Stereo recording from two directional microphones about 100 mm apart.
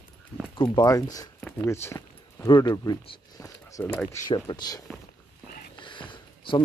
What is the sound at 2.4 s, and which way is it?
Speech, 45° left (ahead or behind).